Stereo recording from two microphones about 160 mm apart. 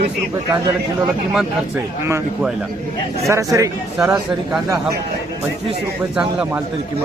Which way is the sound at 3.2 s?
20° right (ahead or behind).